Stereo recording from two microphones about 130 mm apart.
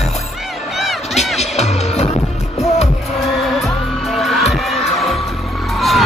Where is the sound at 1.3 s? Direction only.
55° left (ahead or behind).